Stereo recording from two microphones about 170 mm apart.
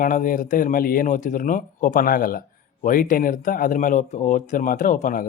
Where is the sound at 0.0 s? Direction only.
50° left (ahead or behind).